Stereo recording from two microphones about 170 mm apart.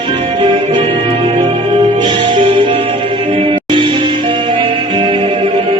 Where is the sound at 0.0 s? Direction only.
30° right (ahead or behind).